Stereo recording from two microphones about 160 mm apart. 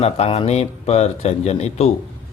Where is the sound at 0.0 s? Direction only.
40° left (ahead or behind).